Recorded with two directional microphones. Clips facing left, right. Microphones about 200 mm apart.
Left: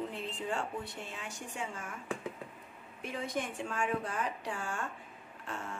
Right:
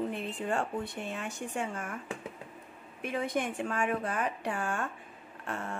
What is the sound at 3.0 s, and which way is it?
Speech, 60° right (ahead or behind).